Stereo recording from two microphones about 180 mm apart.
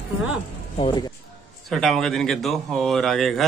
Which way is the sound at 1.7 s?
Centre (ahead or behind).